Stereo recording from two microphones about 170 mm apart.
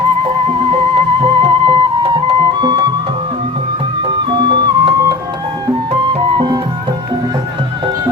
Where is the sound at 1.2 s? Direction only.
30° right (ahead or behind).